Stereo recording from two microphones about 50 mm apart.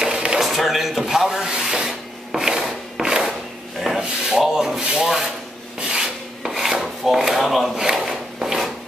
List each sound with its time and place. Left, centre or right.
0.0 s a sound: centre
0.5 s rub: centre
5.0 s speech: centre
5.8 s filing: centre
6.8 s drawer open or close: centre
7.8 s a sound: centre